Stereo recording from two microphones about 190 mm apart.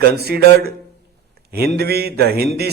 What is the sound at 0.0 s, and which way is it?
A man's voice, 55° right (ahead or behind).